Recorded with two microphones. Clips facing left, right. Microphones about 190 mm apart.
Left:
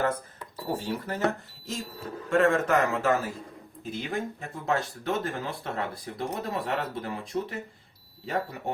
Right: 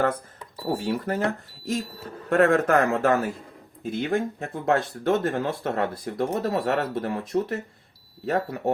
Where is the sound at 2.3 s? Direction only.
60° right (ahead or behind).